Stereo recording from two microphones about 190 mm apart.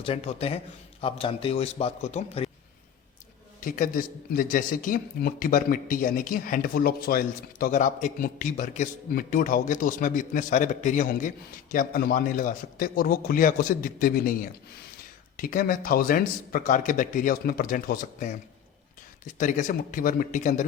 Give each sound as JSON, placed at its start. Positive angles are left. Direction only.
{"t": 0.0, "sound": "a man's voice", "side_deg": 30}
{"t": 3.6, "sound": "a man's voice", "side_deg": 45}